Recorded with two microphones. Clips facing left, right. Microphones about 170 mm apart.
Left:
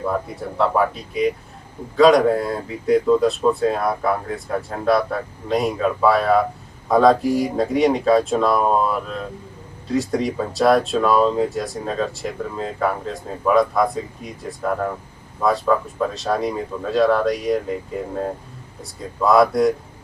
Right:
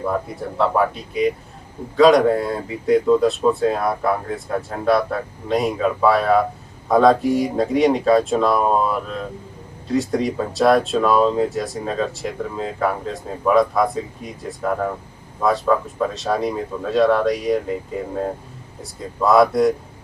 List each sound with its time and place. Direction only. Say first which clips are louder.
0.0 s speech: right 1 dB; centre (ahead or behind)